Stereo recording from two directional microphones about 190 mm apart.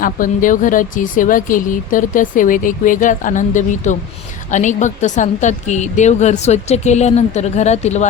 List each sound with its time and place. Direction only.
0.0 s a woman's voice: 45° left (ahead or behind)